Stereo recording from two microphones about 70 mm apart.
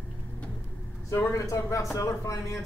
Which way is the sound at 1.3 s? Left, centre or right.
Left.